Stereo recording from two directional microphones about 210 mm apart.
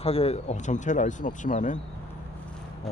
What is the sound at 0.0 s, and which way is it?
Speech, 30° left (ahead or behind).